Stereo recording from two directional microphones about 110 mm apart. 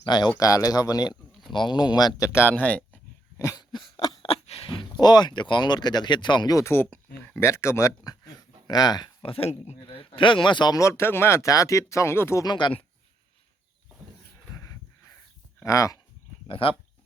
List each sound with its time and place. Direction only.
0.0 s speech: 40° left (ahead or behind)
1.1 s a sound: centre (ahead or behind)
1.5 s speech: 45° left (ahead or behind); by 3.0 s 10° left (ahead or behind)
3.3 s speech: 30° left (ahead or behind)
6.6 s speech: 20° left (ahead or behind); by 9.0 s 40° left (ahead or behind)
9.2 s speech: 55° left (ahead or behind)
10.8 s speech: 25° left (ahead or behind)
12.5 s speech: 45° left (ahead or behind)
15.6 s speech: 30° left (ahead or behind)
16.5 s speech: 55° left (ahead or behind)